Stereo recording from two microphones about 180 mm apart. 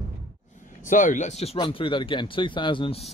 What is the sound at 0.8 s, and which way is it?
Speech, 45° left (ahead or behind).